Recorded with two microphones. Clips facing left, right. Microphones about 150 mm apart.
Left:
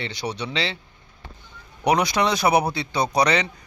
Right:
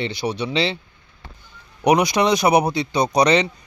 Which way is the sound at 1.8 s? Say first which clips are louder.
Right 4 dB; 15° right (ahead or behind).